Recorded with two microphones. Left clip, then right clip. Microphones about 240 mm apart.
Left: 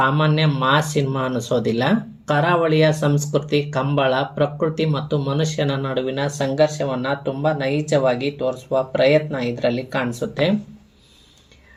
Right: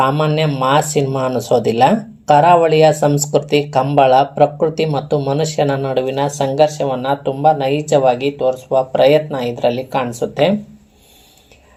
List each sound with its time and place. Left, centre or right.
0.1 s speech: centre
5.1 s speech: right
5.7 s speech: centre